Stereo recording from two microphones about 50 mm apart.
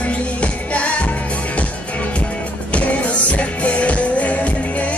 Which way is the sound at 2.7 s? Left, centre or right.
Left.